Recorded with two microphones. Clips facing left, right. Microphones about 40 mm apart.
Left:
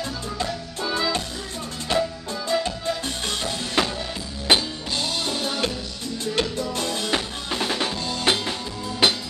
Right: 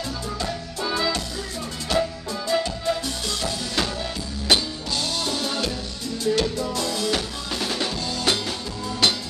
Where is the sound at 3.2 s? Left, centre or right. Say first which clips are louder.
Left 2 dB; left.